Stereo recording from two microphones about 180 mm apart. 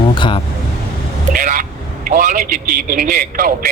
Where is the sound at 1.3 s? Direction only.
50° right (ahead or behind).